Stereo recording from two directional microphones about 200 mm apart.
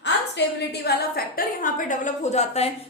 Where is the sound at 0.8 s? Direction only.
45° left (ahead or behind).